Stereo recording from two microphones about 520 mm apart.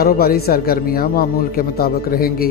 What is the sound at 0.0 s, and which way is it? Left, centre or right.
Speech, centre.